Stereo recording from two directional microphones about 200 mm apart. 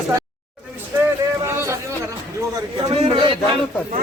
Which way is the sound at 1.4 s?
15° right (ahead or behind).